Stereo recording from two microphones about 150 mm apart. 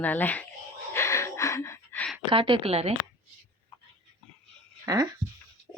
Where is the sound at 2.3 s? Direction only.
35° right (ahead or behind).